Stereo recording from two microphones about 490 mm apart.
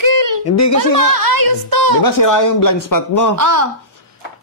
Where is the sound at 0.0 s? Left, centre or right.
Right.